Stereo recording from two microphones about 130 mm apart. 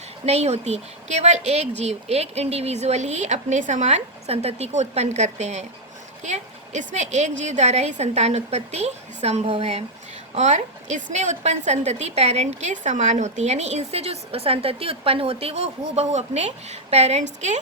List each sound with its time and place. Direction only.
0.3 s a woman's voice: 55° right (ahead or behind)